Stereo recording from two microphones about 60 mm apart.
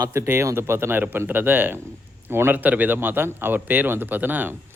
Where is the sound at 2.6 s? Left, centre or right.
Right.